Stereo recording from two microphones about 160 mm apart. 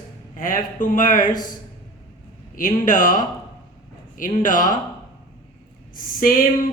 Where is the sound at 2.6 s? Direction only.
55° left (ahead or behind).